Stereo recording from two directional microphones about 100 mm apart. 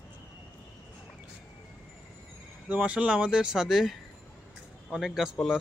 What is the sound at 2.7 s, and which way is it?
Speech, 15° right (ahead or behind).